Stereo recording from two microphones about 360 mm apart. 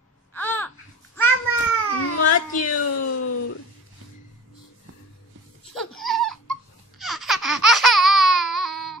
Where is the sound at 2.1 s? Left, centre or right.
Left.